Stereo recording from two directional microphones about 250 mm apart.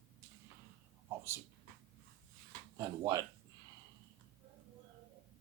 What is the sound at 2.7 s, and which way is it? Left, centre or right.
Speech, centre.